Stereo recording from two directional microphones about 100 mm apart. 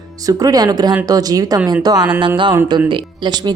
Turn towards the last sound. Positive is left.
turn(degrees=-45)  # may be behind; listen again after turning